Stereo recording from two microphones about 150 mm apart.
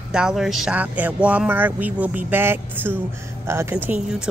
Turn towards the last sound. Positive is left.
turn(degrees=-10)  # may be behind; listen again after turning